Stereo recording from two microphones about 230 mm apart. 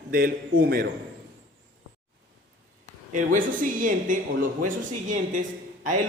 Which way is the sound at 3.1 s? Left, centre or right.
Right.